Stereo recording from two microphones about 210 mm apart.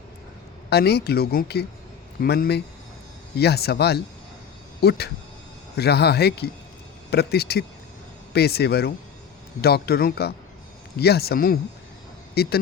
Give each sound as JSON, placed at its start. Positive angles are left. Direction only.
{"t": 0.7, "sound": "speech", "side_deg": 50}